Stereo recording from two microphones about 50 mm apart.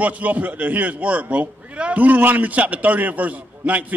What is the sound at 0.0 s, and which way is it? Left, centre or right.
A man's voice, right.